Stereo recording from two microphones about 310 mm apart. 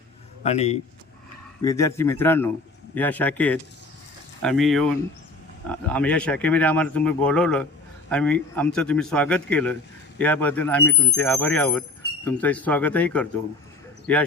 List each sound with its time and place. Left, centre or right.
0.4 s a man's voice: left
1.6 s a man's voice: centre